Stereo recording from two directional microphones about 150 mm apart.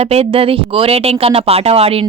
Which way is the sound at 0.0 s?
40° right (ahead or behind).